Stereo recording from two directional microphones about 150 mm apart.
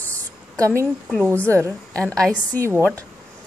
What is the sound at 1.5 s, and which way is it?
Speech, 15° right (ahead or behind).